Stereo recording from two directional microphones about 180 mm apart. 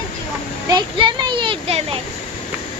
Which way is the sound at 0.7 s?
25° right (ahead or behind).